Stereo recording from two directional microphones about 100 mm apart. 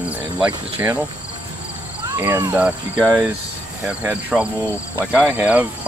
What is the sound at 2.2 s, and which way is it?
Speech, 25° right (ahead or behind).